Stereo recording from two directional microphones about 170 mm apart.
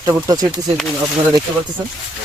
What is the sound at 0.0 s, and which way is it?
Speech, 20° right (ahead or behind).